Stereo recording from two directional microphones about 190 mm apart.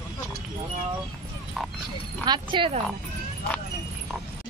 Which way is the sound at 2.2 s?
25° right (ahead or behind).